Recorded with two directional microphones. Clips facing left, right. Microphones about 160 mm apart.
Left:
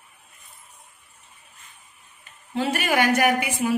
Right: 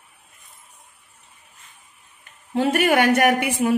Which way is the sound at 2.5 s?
50° right (ahead or behind).